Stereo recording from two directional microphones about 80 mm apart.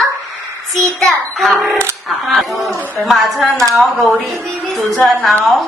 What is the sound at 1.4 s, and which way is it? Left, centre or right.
A woman's voice, centre.